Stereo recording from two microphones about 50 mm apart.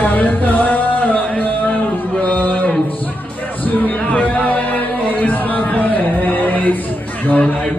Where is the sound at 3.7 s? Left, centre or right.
Left.